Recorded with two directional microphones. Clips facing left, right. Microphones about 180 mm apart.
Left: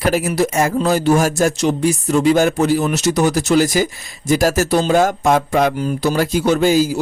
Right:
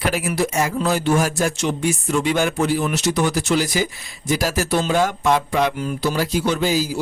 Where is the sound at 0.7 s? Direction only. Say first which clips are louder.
Left 4 dB; 40° left (ahead or behind).